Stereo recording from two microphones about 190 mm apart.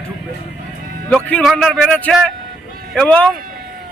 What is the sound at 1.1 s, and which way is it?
A man's voice, centre (ahead or behind).